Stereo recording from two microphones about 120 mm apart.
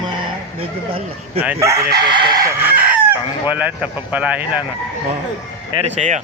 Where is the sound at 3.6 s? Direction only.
10° right (ahead or behind).